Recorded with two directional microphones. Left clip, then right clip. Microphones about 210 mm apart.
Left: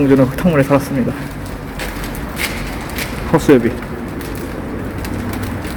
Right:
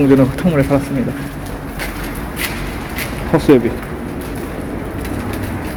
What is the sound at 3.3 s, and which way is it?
Speech, 5° left (ahead or behind).